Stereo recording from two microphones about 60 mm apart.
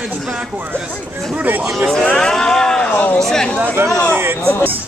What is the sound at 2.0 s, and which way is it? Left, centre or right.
Speech, centre.